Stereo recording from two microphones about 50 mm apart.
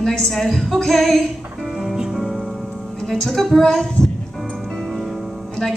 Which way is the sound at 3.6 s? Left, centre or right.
Centre.